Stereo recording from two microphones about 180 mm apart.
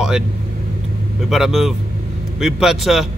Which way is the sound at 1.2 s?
Centre (ahead or behind).